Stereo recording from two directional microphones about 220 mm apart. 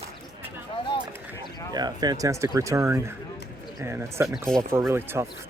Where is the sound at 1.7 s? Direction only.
20° right (ahead or behind).